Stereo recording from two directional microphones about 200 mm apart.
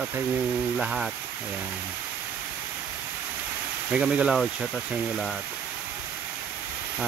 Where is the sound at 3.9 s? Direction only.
5° right (ahead or behind).